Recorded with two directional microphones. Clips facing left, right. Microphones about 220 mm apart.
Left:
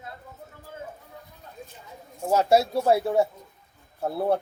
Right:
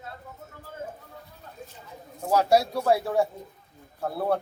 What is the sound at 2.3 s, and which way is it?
Speech, 25° left (ahead or behind).